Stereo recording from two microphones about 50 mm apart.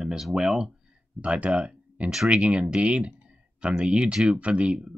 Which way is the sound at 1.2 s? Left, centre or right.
Right.